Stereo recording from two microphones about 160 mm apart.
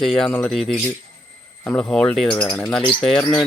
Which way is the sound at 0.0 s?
5° left (ahead or behind).